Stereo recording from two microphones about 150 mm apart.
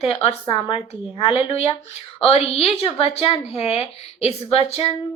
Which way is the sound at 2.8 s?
40° left (ahead or behind).